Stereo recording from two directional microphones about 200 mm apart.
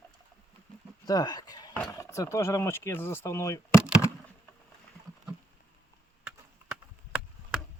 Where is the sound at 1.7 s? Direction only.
10° left (ahead or behind).